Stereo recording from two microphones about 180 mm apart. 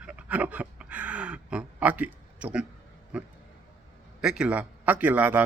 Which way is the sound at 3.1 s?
10° right (ahead or behind).